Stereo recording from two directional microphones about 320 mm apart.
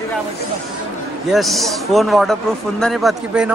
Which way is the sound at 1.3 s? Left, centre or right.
Centre.